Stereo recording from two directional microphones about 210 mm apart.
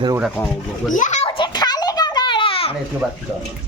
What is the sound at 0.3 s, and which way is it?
Speech, 5° left (ahead or behind).